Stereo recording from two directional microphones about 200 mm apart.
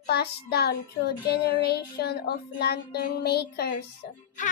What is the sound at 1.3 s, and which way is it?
Child singing, 50° left (ahead or behind).